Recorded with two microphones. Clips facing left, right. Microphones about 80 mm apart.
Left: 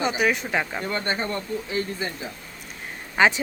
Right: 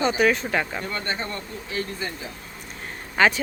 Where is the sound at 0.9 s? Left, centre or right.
Left.